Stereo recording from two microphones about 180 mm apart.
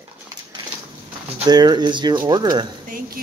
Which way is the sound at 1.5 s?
20° right (ahead or behind).